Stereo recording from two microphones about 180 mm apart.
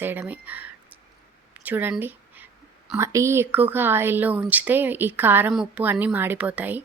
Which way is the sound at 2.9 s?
15° right (ahead or behind).